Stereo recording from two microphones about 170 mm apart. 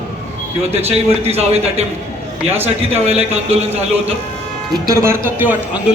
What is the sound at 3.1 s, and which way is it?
Speech, 35° right (ahead or behind).